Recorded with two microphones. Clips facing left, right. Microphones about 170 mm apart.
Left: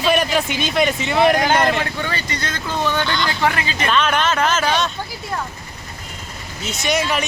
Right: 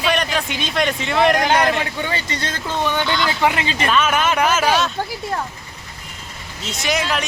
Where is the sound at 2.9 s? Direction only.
15° right (ahead or behind).